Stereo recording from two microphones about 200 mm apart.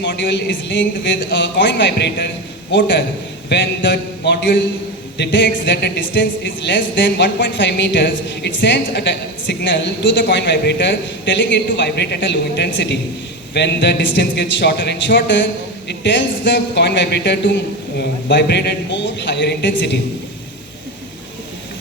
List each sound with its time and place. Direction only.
0.0 s speech: 60° left (ahead or behind)
3.5 s speech: 60° left (ahead or behind)